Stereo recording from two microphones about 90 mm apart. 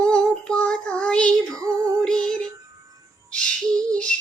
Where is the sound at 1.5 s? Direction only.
40° right (ahead or behind).